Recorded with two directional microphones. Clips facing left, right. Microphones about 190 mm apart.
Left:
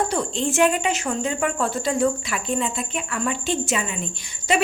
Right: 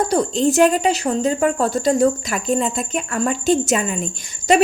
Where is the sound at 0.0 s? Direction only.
40° right (ahead or behind).